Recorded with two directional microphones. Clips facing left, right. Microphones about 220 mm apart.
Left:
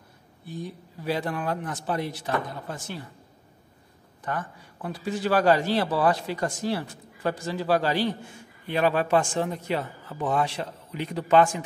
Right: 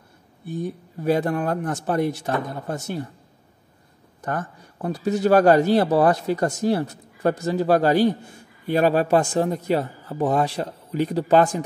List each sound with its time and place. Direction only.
0.5 s speech: 50° right (ahead or behind)
4.2 s a man's voice: 45° right (ahead or behind)